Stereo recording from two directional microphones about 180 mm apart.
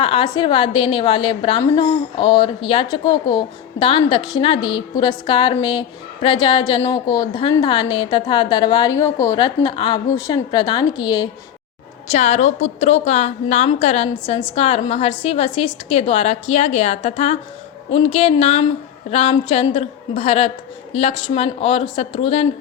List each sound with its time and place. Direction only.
0.0 s a woman's voice: 30° left (ahead or behind)
12.1 s a woman's voice: 40° left (ahead or behind)